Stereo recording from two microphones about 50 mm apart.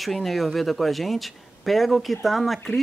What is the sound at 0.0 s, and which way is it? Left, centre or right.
Speech, centre.